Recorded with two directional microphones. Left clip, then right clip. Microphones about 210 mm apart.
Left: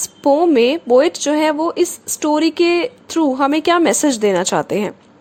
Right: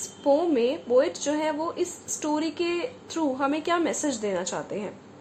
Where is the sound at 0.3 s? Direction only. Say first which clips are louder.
Left 10 dB; 45° left (ahead or behind).